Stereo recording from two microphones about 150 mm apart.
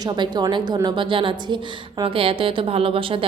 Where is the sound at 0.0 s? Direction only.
25° right (ahead or behind).